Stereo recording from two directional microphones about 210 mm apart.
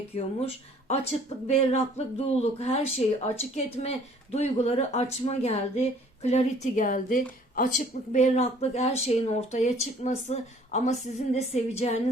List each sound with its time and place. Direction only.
0.1 s speech: 30° left (ahead or behind)